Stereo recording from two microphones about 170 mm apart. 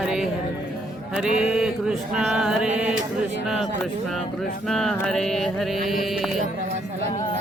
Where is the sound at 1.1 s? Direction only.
5° right (ahead or behind).